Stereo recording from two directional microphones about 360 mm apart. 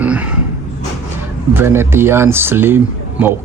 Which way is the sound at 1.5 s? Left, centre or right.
Centre.